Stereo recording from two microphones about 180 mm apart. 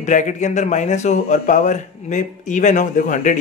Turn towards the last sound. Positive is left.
turn(degrees=45)  # may be behind; listen again after turning